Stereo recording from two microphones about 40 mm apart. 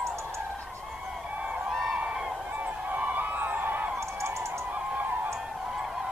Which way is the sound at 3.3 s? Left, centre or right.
Right.